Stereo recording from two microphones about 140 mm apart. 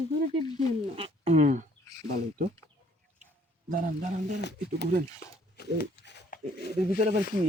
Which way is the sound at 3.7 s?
70° right (ahead or behind).